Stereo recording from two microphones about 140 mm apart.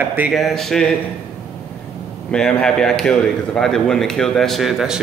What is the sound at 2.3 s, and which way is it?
Speech, 5° left (ahead or behind).